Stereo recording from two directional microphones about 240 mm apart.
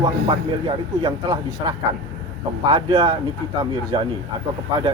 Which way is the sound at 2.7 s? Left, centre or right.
Centre.